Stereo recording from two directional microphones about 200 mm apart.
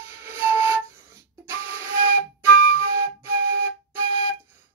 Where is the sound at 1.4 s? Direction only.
10° right (ahead or behind).